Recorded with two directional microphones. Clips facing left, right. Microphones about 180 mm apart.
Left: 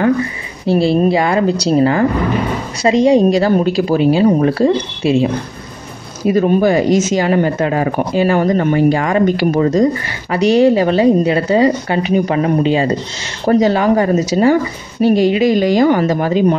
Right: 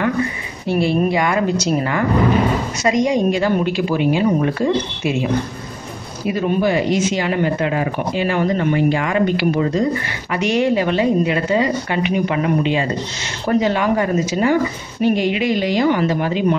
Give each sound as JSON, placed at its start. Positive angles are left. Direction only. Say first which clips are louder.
{"t": 0.7, "sound": "speech", "louder": "left 5 dB", "side_deg": 30}
{"t": 6.2, "sound": "speech", "louder": "left 6 dB", "side_deg": 45}